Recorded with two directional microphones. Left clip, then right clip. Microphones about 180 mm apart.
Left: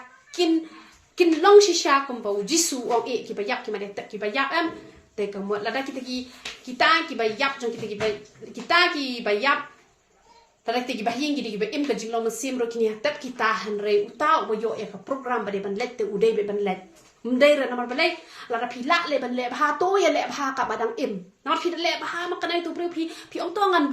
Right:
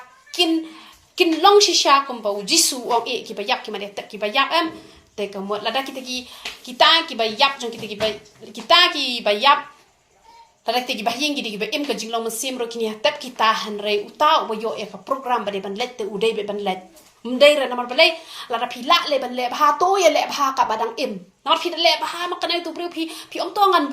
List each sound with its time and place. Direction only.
0.3 s a woman's voice: 25° left (ahead or behind)
10.7 s a woman's voice: 20° left (ahead or behind)